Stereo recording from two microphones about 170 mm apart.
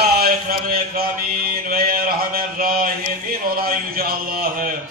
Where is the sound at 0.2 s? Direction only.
60° right (ahead or behind).